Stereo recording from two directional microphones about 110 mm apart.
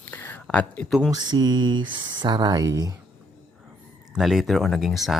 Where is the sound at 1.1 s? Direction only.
40° right (ahead or behind).